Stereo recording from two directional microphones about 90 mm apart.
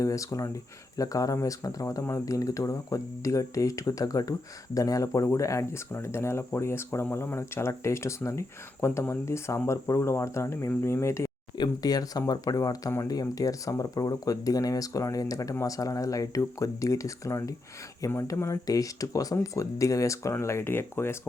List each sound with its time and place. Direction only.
0.0 s speech: 40° left (ahead or behind)
11.5 s speech: 50° left (ahead or behind); by 21.2 s 25° left (ahead or behind)